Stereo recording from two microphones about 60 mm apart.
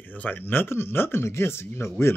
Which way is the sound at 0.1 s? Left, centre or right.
Left.